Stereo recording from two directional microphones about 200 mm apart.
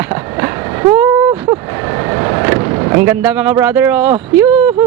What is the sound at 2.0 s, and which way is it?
Vehicle, 20° right (ahead or behind).